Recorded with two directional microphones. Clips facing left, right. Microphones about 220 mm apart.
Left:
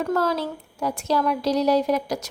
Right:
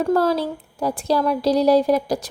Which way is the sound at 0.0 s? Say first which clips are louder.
Right 5 dB; 30° right (ahead or behind).